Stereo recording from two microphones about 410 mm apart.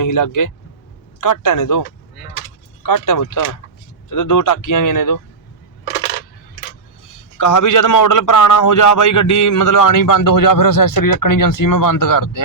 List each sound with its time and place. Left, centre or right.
0.0 s a man's voice: left
2.8 s a man's voice: left
7.3 s a man's voice: left